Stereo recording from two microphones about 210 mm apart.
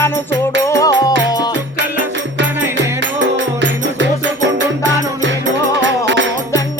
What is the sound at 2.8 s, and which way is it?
Music, 60° right (ahead or behind).